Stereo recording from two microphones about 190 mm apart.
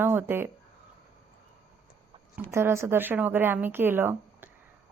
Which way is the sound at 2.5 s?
15° right (ahead or behind).